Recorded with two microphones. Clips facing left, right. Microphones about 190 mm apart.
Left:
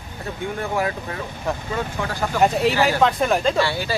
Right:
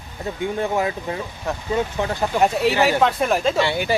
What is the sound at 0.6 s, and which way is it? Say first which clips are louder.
Speech: right 1 dB; 20° right (ahead or behind).